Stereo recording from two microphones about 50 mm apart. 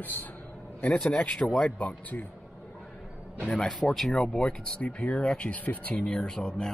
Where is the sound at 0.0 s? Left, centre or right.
Left.